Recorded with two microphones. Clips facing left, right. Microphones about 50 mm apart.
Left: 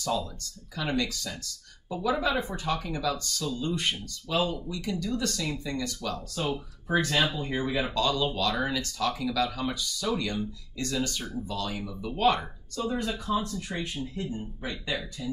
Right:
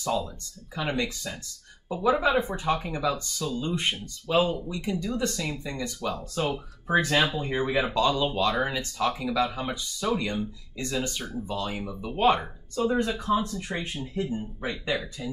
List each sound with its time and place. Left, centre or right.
0.0 s speech: right